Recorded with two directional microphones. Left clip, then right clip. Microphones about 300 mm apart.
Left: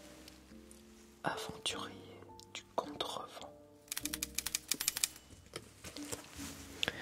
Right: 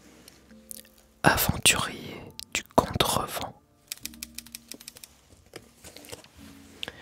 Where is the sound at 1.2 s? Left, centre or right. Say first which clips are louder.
Right 17 dB; right.